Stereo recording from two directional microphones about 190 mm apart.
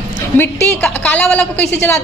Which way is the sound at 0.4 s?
10° left (ahead or behind).